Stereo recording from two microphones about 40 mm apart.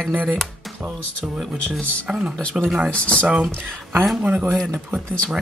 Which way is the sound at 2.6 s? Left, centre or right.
Centre.